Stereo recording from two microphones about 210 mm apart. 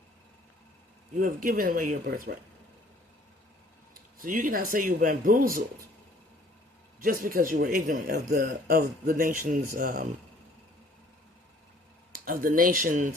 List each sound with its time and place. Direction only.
1.2 s speech: 40° right (ahead or behind)
4.2 s speech: 40° right (ahead or behind)
7.0 s a man's voice: 40° right (ahead or behind)
12.2 s speech: 40° right (ahead or behind)